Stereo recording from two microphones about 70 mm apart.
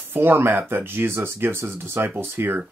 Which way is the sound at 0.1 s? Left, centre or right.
Right.